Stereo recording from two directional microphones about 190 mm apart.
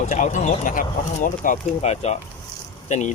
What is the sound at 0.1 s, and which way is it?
Speech, 40° left (ahead or behind).